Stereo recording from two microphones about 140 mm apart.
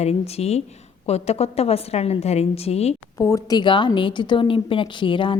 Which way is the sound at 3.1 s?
20° left (ahead or behind).